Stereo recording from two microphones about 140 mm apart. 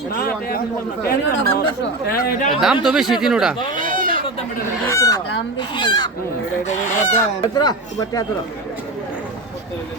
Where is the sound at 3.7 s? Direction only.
70° right (ahead or behind).